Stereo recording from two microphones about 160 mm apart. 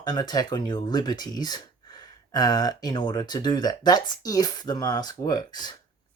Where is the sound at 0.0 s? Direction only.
25° left (ahead or behind).